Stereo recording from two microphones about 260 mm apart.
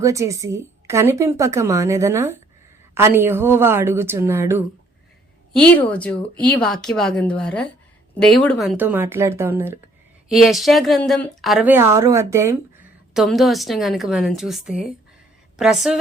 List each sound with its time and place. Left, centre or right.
0.0 s a woman's voice: centre
5.7 s a woman's voice: centre